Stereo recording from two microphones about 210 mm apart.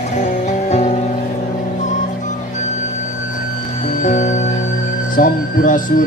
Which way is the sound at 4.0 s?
35° left (ahead or behind).